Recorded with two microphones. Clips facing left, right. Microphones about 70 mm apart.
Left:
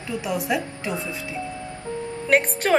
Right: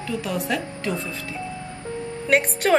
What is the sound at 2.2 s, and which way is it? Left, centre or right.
Speech, centre.